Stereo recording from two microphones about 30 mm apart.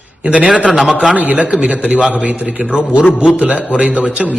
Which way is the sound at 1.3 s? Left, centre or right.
Right.